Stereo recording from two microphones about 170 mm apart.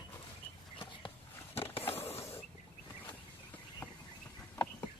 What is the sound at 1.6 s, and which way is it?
Skateboard, 35° left (ahead or behind).